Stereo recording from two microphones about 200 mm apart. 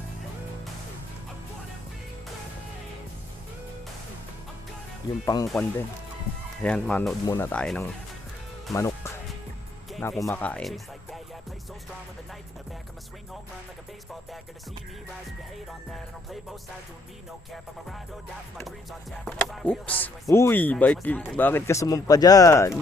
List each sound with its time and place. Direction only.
5.2 s speech: 20° left (ahead or behind)
6.6 s speech: 5° left (ahead or behind)
8.7 s music: 15° left (ahead or behind)
10.0 s speech: centre (ahead or behind)
18.6 s speech: centre (ahead or behind)